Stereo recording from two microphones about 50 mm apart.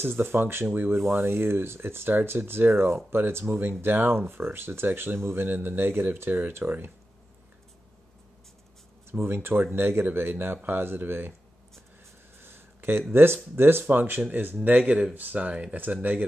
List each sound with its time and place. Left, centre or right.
0.0 s speech: right
9.2 s speech: right
12.4 s a sound: right
13.1 s speech: right
15.3 s speech: right
15.7 s speech: right